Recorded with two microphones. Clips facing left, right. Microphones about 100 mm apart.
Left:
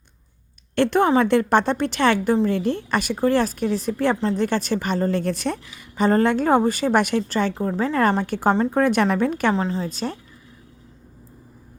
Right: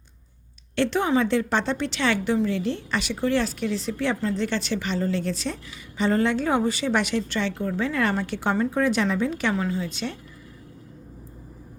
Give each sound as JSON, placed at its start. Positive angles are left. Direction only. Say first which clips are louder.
{"t": 0.8, "sound": "a woman's voice", "louder": "left 4 dB", "side_deg": 50}
{"t": 8.7, "sound": "a woman's voice", "louder": "left 4 dB", "side_deg": 55}
{"t": 9.6, "sound": "a woman's voice", "louder": "left 3 dB", "side_deg": 30}